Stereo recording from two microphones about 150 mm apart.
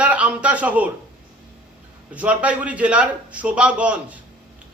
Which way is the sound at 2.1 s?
10° right (ahead or behind).